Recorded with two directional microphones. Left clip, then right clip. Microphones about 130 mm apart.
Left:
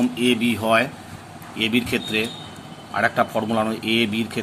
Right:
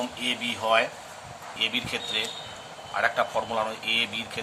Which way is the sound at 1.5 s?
50° left (ahead or behind).